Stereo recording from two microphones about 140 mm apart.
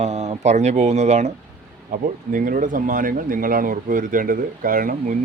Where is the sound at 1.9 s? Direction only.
75° right (ahead or behind).